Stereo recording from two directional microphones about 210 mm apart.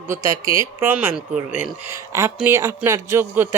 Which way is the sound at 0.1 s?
15° right (ahead or behind).